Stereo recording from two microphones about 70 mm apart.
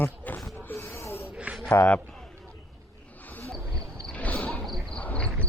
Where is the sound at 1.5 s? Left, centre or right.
Right.